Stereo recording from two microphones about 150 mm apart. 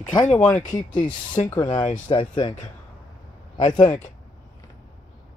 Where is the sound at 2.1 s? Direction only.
35° left (ahead or behind).